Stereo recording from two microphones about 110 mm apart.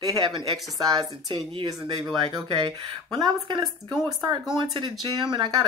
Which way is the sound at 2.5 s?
40° right (ahead or behind).